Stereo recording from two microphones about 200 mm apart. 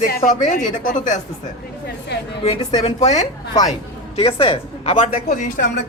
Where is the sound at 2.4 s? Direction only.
20° left (ahead or behind).